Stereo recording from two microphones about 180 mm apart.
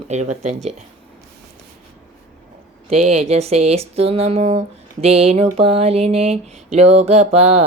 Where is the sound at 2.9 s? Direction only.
35° right (ahead or behind).